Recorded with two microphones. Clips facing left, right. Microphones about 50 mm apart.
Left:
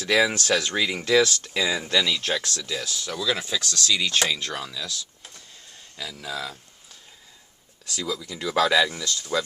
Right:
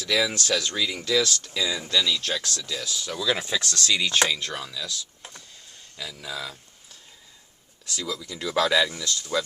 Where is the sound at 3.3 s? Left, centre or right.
Right.